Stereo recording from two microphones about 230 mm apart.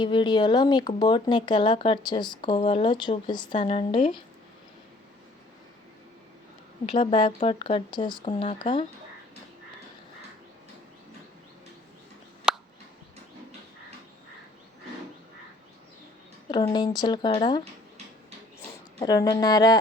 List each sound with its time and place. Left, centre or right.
0.0 s speech: left
6.9 s speech: left
12.5 s a sound: centre
16.5 s speech: centre
18.9 s speech: centre